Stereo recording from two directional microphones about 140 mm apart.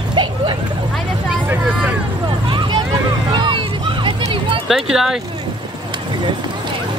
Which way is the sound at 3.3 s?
35° right (ahead or behind).